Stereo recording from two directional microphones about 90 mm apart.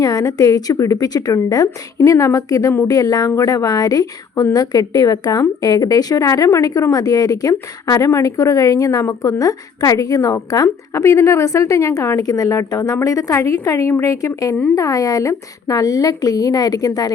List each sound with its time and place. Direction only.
0.0 s a woman's voice: 40° left (ahead or behind)